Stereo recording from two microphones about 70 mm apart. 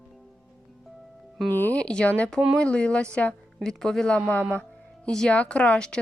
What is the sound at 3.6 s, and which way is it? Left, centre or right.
Speech, centre.